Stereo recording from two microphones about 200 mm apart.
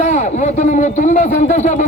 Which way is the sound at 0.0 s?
35° left (ahead or behind).